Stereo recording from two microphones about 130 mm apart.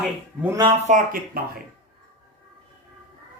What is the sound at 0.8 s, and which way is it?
Speech, 85° right.